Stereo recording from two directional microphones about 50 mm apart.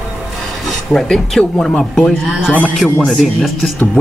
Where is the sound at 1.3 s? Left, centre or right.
Centre.